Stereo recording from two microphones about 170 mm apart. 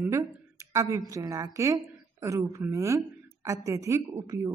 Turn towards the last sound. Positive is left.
turn(degrees=-15)  # may be behind; listen again after turning